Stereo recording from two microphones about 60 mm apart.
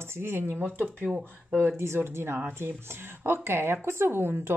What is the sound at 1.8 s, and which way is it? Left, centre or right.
A woman's voice, right.